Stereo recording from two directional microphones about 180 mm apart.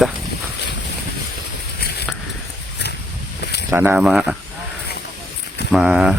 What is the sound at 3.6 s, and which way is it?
Speech, 10° right (ahead or behind).